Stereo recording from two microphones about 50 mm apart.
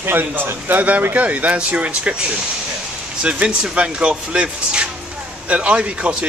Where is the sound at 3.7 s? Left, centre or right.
Right.